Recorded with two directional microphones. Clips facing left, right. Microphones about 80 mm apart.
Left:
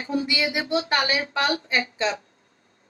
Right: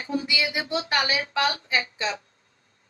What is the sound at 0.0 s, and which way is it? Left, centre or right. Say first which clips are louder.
A woman's voice: left 2 dB; left.